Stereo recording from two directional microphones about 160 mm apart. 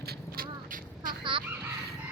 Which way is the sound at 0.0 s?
75° right (ahead or behind).